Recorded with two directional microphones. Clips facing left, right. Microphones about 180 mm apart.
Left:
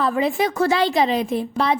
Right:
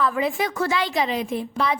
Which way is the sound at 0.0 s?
30° left (ahead or behind).